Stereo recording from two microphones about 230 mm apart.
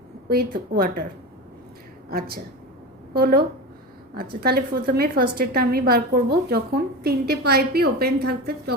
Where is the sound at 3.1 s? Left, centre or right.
Right.